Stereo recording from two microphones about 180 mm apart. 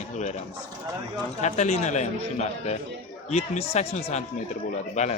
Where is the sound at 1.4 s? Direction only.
40° left (ahead or behind).